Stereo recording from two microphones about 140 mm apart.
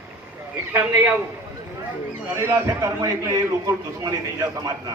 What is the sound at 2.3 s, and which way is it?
A man's voice, 20° right (ahead or behind).